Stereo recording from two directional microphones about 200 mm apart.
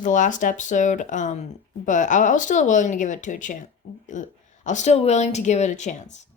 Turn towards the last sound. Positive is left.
turn(degrees=35)  # may be behind; listen again after turning